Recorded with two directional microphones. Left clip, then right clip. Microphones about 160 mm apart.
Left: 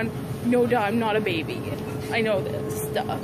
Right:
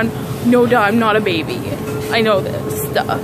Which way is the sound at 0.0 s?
15° right (ahead or behind).